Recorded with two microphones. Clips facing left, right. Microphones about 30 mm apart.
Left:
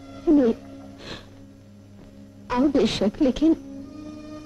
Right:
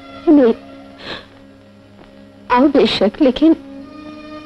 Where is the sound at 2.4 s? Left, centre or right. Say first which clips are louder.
Right 9 dB; right.